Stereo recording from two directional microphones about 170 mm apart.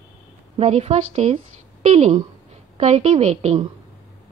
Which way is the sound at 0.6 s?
40° right (ahead or behind).